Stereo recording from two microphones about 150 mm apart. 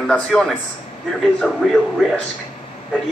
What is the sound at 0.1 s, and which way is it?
Speech, 5° left (ahead or behind).